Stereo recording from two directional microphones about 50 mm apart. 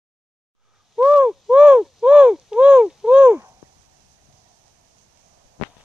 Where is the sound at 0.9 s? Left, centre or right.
Right.